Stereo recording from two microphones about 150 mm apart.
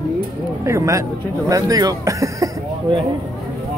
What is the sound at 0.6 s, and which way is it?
Speech, 20° right (ahead or behind).